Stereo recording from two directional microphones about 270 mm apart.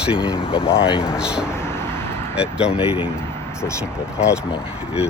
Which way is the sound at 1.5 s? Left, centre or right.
Centre.